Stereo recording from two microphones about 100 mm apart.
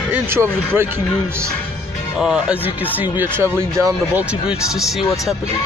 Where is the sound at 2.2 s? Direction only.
5° right (ahead or behind).